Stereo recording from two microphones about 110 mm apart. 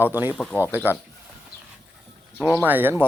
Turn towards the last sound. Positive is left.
turn(degrees=-20)  # may be behind; listen again after turning